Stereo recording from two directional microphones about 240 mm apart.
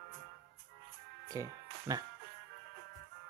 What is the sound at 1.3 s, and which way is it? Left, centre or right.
Music, centre.